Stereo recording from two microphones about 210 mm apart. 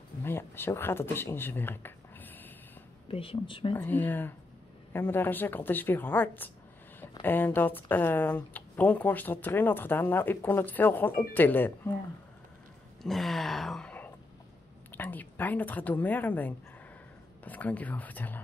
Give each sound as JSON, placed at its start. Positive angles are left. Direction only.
{"t": 0.2, "sound": "a sound", "side_deg": 10}
{"t": 3.1, "sound": "speech", "side_deg": 25}
{"t": 3.7, "sound": "speech", "side_deg": 10}
{"t": 13.0, "sound": "speech", "side_deg": 0}